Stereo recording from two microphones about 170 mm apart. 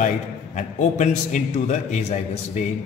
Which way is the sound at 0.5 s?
45° left (ahead or behind).